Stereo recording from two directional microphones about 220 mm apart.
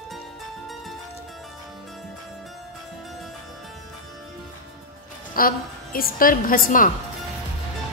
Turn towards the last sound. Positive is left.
turn(degrees=40)  # may be behind; listen again after turning